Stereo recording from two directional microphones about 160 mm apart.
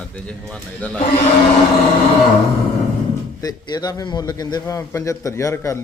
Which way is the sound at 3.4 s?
25° left (ahead or behind).